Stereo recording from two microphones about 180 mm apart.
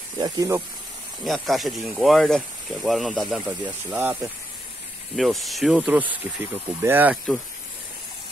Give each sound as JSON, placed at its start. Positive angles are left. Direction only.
{"t": 0.2, "sound": "speech", "side_deg": -20}
{"t": 1.2, "sound": "speech", "side_deg": 0}
{"t": 5.1, "sound": "speech", "side_deg": 0}